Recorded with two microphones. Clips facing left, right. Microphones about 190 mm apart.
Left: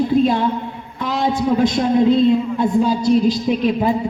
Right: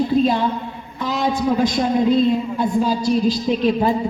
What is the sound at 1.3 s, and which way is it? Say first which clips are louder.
A man's voice: left 2 dB; 25° left (ahead or behind).